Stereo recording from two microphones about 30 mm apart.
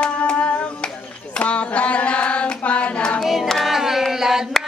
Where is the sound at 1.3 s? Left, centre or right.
Left.